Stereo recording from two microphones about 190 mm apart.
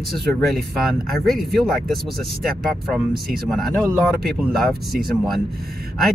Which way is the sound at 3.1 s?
50° right (ahead or behind).